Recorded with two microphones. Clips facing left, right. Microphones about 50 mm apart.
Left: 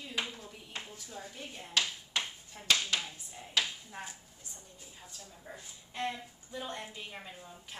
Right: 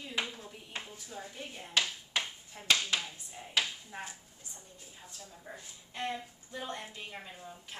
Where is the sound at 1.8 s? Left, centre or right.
Centre.